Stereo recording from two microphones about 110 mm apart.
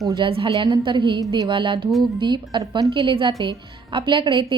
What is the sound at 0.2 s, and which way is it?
A woman's voice, 55° right (ahead or behind).